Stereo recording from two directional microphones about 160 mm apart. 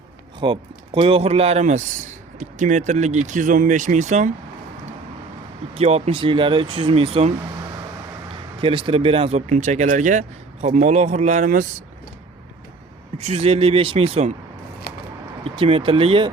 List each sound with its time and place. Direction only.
0.3 s a man's voice: 30° right (ahead or behind); by 4.3 s 50° right (ahead or behind)
5.7 s a man's voice: 40° right (ahead or behind); by 11.7 s 55° right (ahead or behind)
13.1 s a man's voice: 40° right (ahead or behind)
14.9 s a sound: 75° left (ahead or behind)
15.4 s a man's voice: 35° right (ahead or behind)